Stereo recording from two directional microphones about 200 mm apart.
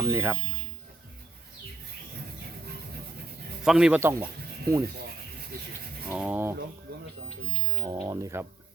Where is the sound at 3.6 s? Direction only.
5° right (ahead or behind).